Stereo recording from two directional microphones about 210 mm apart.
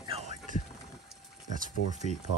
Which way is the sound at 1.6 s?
35° right (ahead or behind).